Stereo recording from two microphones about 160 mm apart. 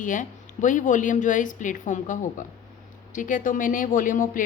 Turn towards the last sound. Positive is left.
turn(degrees=55)  # may be behind; listen again after turning